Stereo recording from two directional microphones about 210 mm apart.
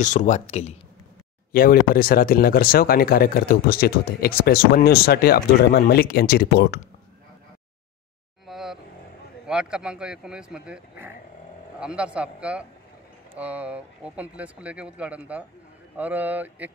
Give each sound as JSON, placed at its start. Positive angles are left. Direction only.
{"t": 0.0, "sound": "speech", "side_deg": 35}
{"t": 1.5, "sound": "speech", "side_deg": 45}
{"t": 8.5, "sound": "vehicle", "side_deg": 0}
{"t": 9.5, "sound": "speech", "side_deg": -5}